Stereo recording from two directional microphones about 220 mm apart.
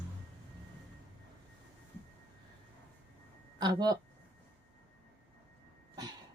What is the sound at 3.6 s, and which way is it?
Speech, 20° right (ahead or behind).